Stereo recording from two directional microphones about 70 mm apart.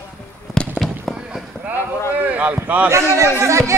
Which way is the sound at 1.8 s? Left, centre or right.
Left.